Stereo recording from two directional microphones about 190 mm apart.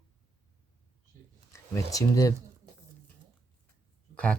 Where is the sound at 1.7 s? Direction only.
20° left (ahead or behind).